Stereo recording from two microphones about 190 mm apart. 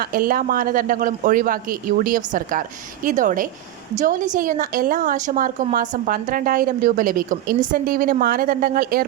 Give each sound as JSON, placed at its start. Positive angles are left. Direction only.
{"t": 0.0, "sound": "a woman's voice", "side_deg": -50}